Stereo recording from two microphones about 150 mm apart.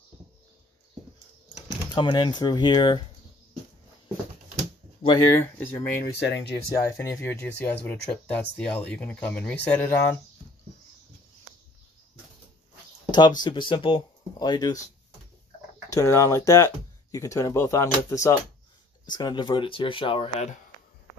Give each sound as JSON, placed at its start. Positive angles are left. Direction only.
{"t": 2.0, "sound": "speech", "side_deg": 30}
{"t": 5.0, "sound": "speech", "side_deg": 25}
{"t": 5.3, "sound": "speech", "side_deg": 15}
{"t": 13.4, "sound": "speech", "side_deg": 30}
{"t": 15.9, "sound": "speech", "side_deg": 20}